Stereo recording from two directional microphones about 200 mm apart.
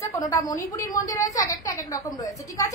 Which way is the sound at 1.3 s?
15° left (ahead or behind).